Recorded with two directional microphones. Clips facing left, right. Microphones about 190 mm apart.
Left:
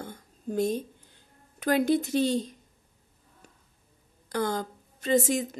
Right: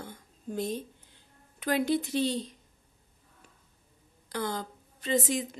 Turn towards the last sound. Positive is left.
turn(degrees=45)  # may be behind; listen again after turning